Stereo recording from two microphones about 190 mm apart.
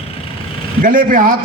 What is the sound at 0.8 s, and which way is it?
Speech, 45° right (ahead or behind).